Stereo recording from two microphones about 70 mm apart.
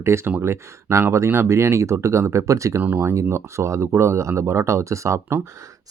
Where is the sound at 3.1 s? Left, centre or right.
Right.